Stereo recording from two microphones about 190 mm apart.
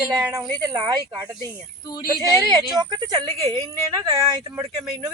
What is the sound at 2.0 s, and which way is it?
A woman's voice, 20° right (ahead or behind).